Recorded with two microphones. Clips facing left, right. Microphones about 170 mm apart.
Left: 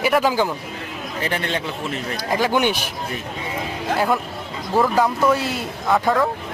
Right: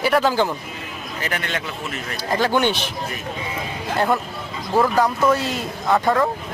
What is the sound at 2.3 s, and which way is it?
Speech, 10° left (ahead or behind).